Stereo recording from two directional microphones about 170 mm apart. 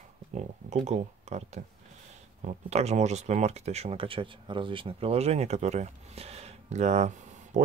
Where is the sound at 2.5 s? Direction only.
40° right (ahead or behind).